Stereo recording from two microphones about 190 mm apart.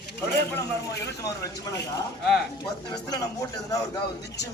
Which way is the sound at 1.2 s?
15° left (ahead or behind).